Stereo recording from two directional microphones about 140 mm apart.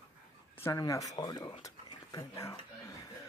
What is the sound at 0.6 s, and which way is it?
Speech, 25° left (ahead or behind).